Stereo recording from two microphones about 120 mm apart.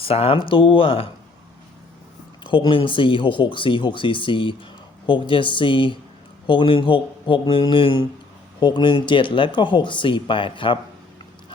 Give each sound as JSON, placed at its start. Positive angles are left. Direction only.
{"t": 0.0, "sound": "speech", "side_deg": 55}
{"t": 2.4, "sound": "speech", "side_deg": 40}